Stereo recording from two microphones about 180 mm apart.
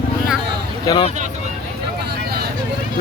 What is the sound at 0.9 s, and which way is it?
Speech, 25° left (ahead or behind).